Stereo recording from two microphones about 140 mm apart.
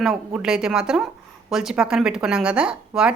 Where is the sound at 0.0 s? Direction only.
5° right (ahead or behind).